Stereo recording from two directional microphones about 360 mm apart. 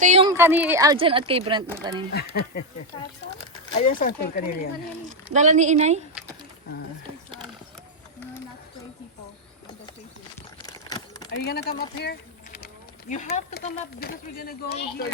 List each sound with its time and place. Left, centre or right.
0.0 s speech: centre
3.7 s speech: centre
5.0 s speech: centre
10.7 s a sound: centre
11.3 s speech: left